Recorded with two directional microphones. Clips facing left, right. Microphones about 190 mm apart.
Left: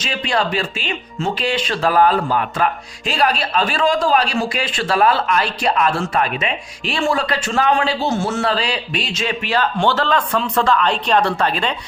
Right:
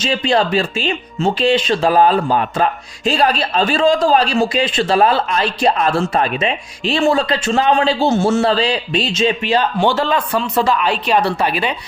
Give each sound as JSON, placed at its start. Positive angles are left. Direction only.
{"t": 0.0, "sound": "speech", "side_deg": -25}